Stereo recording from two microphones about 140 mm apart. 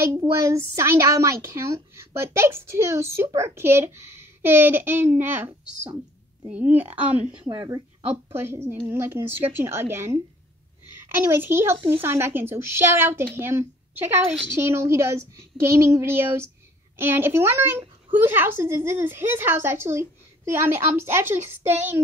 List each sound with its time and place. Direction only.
0.0 s a child's voice: 20° right (ahead or behind)
7.5 s a woman's voice: 30° right (ahead or behind)
8.3 s a child's voice: 15° right (ahead or behind)
11.3 s a child's voice: 15° right (ahead or behind)